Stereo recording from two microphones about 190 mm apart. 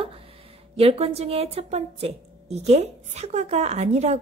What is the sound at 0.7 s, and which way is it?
A woman's voice, 30° right (ahead or behind).